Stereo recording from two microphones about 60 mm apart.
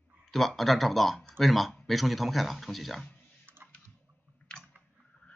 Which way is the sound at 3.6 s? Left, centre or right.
Right.